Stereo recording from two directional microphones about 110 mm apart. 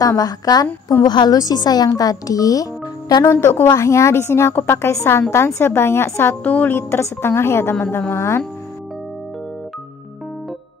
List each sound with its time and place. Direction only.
0.0 s speech: 35° left (ahead or behind)
3.3 s a woman's voice: 20° left (ahead or behind)